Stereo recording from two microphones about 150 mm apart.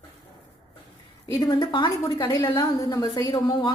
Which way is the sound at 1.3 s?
25° left (ahead or behind).